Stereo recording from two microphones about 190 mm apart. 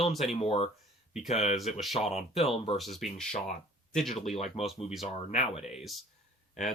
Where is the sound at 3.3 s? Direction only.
40° left (ahead or behind).